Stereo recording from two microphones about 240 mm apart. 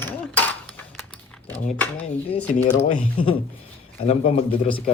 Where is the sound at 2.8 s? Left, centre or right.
Left.